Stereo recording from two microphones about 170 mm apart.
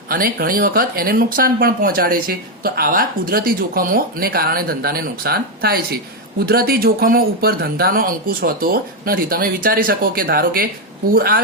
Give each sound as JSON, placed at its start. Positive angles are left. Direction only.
{"t": 0.1, "sound": "speech", "side_deg": -60}